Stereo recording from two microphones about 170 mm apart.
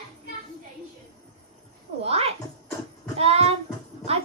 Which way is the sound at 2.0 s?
35° right (ahead or behind).